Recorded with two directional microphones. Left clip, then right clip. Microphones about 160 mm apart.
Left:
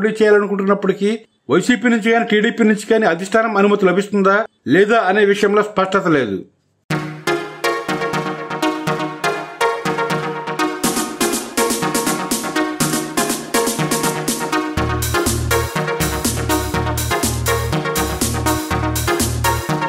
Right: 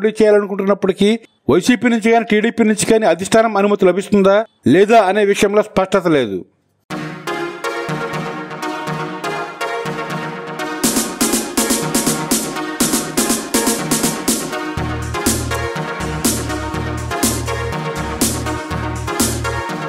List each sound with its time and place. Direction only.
0.0 s speech: 50° right (ahead or behind)
10.8 s music: centre (ahead or behind)